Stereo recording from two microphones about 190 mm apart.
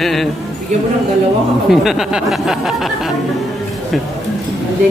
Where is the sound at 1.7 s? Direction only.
Centre (ahead or behind).